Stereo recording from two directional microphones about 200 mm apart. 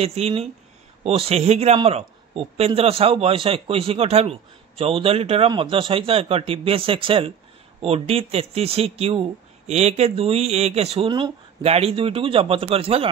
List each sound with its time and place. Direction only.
0.0 s a man's voice: 30° right (ahead or behind)